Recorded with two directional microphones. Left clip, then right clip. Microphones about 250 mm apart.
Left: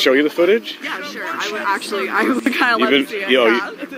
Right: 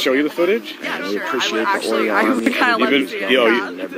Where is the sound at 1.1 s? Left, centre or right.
Centre.